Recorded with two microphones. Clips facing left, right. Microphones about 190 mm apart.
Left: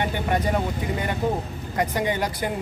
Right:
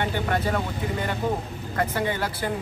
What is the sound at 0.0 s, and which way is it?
Speech, 15° left (ahead or behind).